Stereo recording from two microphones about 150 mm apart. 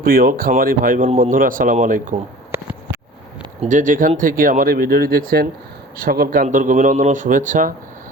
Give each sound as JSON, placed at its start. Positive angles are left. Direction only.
{"t": 0.0, "sound": "speech", "side_deg": -75}
{"t": 2.5, "sound": "a sound", "side_deg": -15}
{"t": 3.6, "sound": "speech", "side_deg": -55}